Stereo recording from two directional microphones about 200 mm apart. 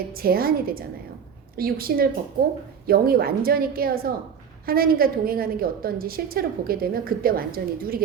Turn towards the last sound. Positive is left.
turn(degrees=-45)  # may be behind; listen again after turning